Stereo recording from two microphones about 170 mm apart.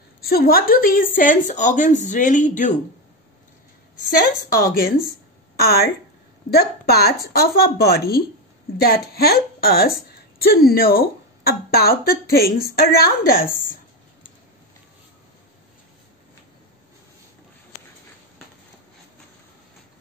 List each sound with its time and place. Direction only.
0.2 s a woman's voice: 65° left (ahead or behind); by 2.7 s 45° left (ahead or behind)
4.5 s a woman's voice: 60° left (ahead or behind)